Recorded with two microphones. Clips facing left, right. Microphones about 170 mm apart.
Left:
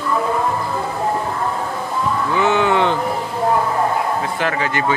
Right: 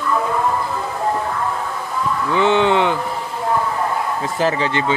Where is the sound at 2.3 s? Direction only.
25° right (ahead or behind).